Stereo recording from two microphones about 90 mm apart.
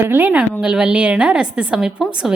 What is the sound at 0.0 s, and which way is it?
A woman's voice, 20° right (ahead or behind).